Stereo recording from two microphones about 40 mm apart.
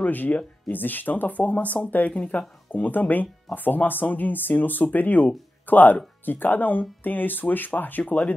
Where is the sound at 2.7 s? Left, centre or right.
Left.